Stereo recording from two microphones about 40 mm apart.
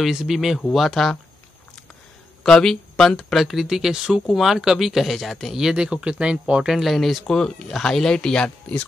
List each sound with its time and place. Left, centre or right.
0.0 s speech: centre
0.7 s speech: centre
2.4 s speech: centre
3.3 s speech: centre
5.6 s speech: centre
6.7 s speech: centre
7.2 s speech: centre